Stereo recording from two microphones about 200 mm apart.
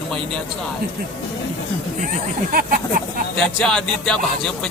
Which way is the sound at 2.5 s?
45° right (ahead or behind).